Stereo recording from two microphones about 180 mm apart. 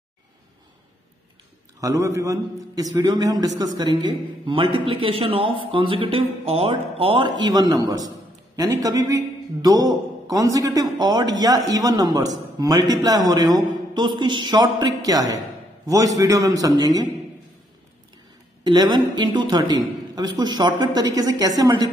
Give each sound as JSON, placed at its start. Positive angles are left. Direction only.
{"t": 1.8, "sound": "a man's voice", "side_deg": -15}
{"t": 18.6, "sound": "a man's voice", "side_deg": -25}